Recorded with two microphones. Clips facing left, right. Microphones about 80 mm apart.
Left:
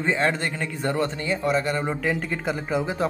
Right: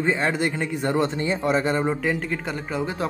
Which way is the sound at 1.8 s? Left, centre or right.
Centre.